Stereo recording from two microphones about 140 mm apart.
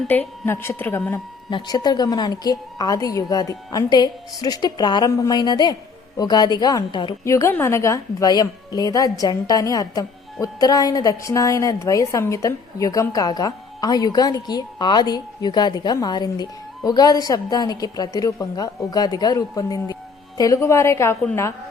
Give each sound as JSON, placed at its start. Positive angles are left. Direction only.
{"t": 0.1, "sound": "speech", "side_deg": 15}
{"t": 1.5, "sound": "a woman's voice", "side_deg": 30}
{"t": 7.3, "sound": "a woman's voice", "side_deg": 20}